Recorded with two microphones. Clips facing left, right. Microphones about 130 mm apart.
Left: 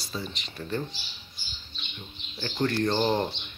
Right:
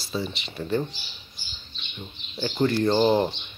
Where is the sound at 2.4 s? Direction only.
10° right (ahead or behind).